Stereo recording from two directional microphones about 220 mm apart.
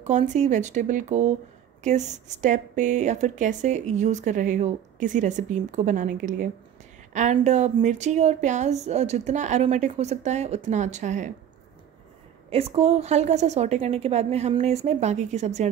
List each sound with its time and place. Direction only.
0.0 s a woman's voice: 35° right (ahead or behind)
12.4 s a woman's voice: 25° right (ahead or behind)